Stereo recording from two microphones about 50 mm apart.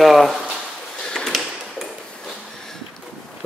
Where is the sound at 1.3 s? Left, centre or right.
Centre.